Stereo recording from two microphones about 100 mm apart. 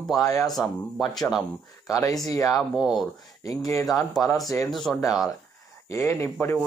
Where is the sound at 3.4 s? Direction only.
35° left (ahead or behind).